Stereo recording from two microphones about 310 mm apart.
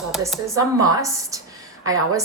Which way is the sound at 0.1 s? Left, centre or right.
Centre.